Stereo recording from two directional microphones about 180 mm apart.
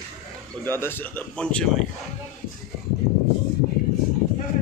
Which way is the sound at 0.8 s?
10° left (ahead or behind).